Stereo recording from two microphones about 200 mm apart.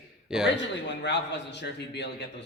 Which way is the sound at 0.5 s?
60° left (ahead or behind).